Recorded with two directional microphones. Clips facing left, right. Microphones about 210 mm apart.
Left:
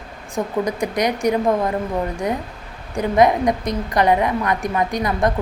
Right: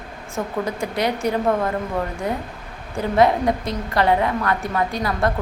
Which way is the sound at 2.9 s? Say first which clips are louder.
Left 2 dB; 15° left (ahead or behind).